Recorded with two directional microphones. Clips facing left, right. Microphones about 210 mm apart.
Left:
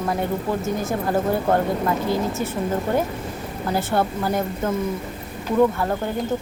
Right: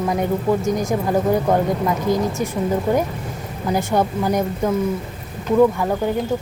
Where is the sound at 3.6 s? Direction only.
15° right (ahead or behind).